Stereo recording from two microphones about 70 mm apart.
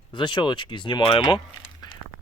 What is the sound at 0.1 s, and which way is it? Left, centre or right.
Speech, left.